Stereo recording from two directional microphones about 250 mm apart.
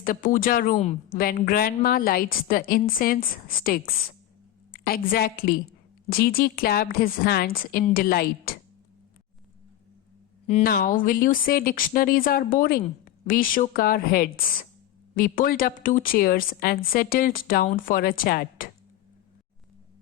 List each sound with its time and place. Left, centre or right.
0.0 s speech: left
10.4 s speech: left